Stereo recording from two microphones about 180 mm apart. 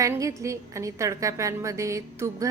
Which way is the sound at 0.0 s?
15° right (ahead or behind).